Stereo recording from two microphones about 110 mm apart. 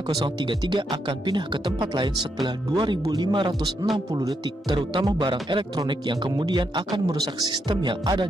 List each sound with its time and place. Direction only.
0.5 s speech: 45° right (ahead or behind)